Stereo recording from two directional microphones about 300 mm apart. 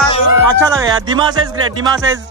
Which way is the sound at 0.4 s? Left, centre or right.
Centre.